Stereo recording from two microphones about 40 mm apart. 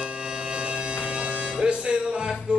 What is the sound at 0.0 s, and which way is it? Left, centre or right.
Bagpipes, right.